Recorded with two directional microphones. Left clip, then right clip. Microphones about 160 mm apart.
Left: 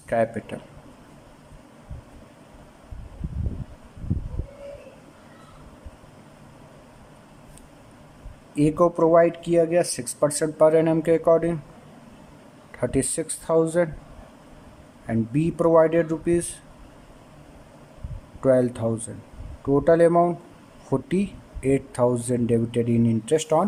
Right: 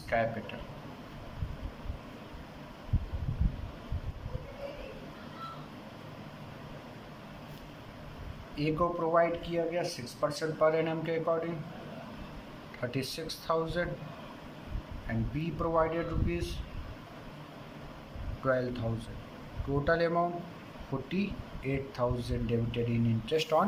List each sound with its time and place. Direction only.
0.1 s speech: 50° left (ahead or behind)
8.5 s speech: 55° left (ahead or behind)
12.8 s speech: 55° left (ahead or behind)
15.0 s speech: 60° left (ahead or behind)
18.4 s speech: 50° left (ahead or behind)